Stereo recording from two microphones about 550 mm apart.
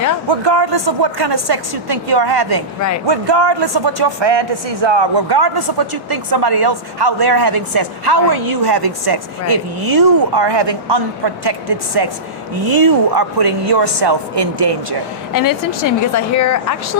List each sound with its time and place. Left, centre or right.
0.3 s a woman's voice: right
15.3 s speech: left